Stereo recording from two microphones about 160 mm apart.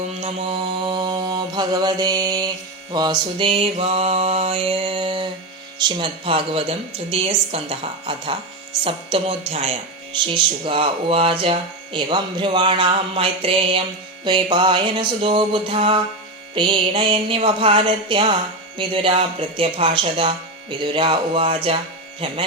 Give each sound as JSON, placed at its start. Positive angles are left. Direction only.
{"t": 0.2, "sound": "mantra", "side_deg": -40}
{"t": 2.9, "sound": "speech", "side_deg": -25}
{"t": 14.3, "sound": "mantra", "side_deg": -30}
{"t": 16.6, "sound": "speech", "side_deg": -30}